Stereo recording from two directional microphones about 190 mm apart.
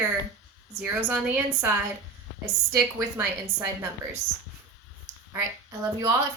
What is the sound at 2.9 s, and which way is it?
Speech, 10° right (ahead or behind).